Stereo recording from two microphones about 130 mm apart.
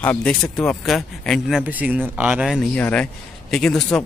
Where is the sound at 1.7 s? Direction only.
10° right (ahead or behind).